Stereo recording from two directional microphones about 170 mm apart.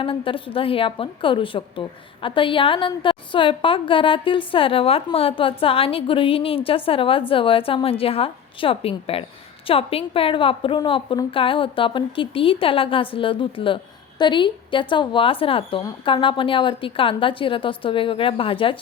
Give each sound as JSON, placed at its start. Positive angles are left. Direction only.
{"t": 0.0, "sound": "a woman's voice", "side_deg": 30}